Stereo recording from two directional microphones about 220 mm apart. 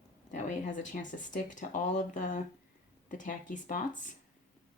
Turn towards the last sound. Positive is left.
turn(degrees=35)  # may be behind; listen again after turning